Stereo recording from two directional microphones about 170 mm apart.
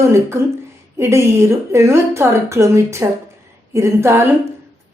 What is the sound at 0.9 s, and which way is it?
A woman's voice, 15° right (ahead or behind).